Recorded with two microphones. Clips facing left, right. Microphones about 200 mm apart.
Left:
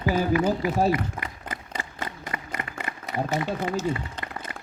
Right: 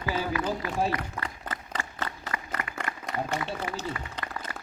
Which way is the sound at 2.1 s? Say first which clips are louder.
Left 1 dB; 25° left (ahead or behind).